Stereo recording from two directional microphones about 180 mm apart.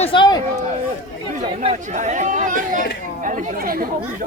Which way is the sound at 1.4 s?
40° right (ahead or behind).